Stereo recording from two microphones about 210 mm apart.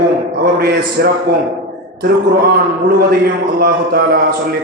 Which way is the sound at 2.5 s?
45° right (ahead or behind).